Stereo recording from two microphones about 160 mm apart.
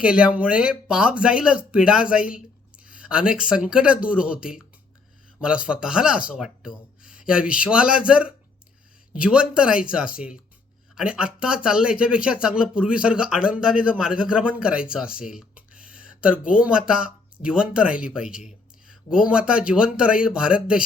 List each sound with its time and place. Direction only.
0.0 s speech: 5° right (ahead or behind)